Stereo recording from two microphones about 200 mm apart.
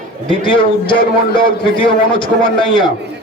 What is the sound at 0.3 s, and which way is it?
Speech, 25° left (ahead or behind).